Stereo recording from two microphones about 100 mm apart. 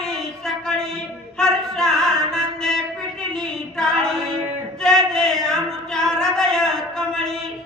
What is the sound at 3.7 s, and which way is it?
Female singing, 5° left (ahead or behind).